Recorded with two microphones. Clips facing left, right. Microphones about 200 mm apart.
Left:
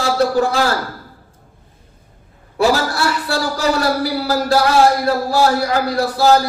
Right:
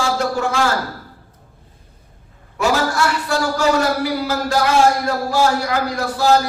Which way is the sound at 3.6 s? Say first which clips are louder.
Even; 35° left (ahead or behind).